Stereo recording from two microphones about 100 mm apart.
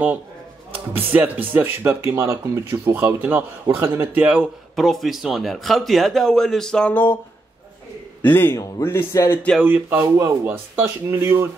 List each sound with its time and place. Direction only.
0.9 s speech: 15° right (ahead or behind)
4.3 s speech: 5° right (ahead or behind); by 7.2 s 15° left (ahead or behind)
8.2 s a man's voice: 20° left (ahead or behind)
9.6 s speech: 15° right (ahead or behind)